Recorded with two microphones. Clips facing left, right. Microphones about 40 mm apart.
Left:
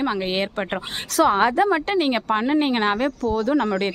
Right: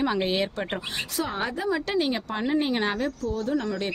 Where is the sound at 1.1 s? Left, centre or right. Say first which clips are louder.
Left 13 dB; left.